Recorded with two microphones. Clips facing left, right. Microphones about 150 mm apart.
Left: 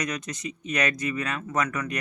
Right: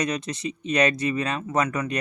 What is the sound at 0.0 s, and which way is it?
Speech, 30° right (ahead or behind).